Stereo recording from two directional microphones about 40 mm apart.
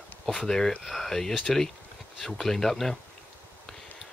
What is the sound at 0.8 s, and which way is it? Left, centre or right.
Speech, centre.